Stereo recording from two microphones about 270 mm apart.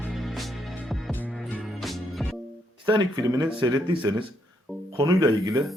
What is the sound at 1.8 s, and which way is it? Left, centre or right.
Music, centre.